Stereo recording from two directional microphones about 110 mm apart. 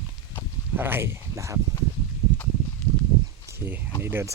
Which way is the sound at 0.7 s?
20° right (ahead or behind).